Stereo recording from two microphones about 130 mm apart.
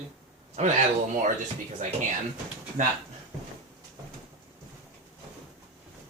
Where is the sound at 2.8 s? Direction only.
75° right (ahead or behind).